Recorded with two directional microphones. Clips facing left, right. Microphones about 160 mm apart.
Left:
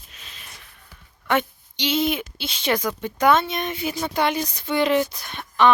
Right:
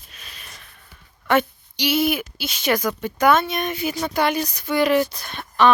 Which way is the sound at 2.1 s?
25° left (ahead or behind).